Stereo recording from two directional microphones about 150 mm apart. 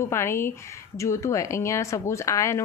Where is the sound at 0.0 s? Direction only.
15° left (ahead or behind).